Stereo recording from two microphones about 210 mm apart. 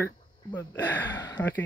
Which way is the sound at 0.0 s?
10° left (ahead or behind).